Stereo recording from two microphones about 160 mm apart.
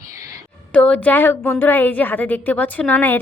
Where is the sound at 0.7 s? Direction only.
5° left (ahead or behind).